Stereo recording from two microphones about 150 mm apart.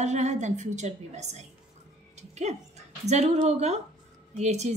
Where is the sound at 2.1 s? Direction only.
50° right (ahead or behind).